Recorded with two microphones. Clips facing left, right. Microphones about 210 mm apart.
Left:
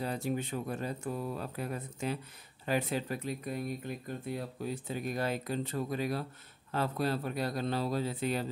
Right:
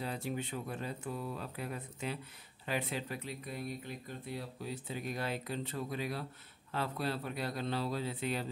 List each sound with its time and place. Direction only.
0.0 s speech: 45° left (ahead or behind)